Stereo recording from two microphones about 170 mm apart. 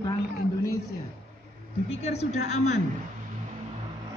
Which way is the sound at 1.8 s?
40° left (ahead or behind).